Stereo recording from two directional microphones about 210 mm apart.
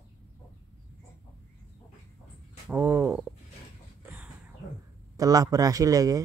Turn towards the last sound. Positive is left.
turn(degrees=-15)  # may be behind; listen again after turning